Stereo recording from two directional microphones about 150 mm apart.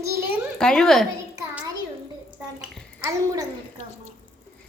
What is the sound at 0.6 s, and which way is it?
Speech, 5° left (ahead or behind).